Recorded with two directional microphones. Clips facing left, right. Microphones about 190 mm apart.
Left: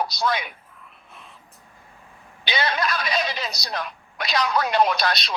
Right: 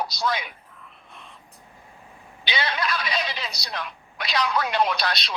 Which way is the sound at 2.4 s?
45° left (ahead or behind).